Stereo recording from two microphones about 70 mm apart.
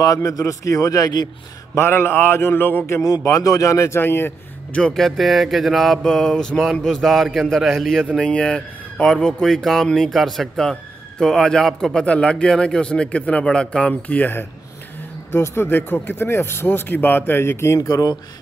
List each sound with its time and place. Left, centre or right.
0.0 s a man's voice: left
1.8 s speech: left
3.0 s a man's voice: left
4.0 s speech: left
4.9 s a sound: centre
8.2 s a man's voice: centre
15.3 s speech: left